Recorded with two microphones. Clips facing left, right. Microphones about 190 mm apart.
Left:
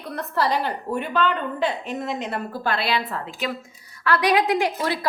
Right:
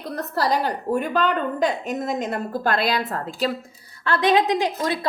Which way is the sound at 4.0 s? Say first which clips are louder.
Right 1 dB; 25° right (ahead or behind).